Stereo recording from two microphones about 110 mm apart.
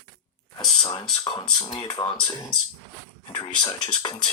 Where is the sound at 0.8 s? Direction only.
45° left (ahead or behind).